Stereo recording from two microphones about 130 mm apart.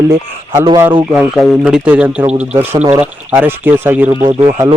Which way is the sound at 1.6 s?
10° right (ahead or behind).